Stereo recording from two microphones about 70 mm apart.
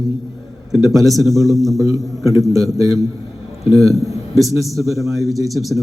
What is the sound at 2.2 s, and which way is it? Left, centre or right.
A man's voice, right.